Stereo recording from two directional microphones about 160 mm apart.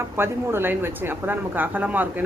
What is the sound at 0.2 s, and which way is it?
Speech, 15° right (ahead or behind).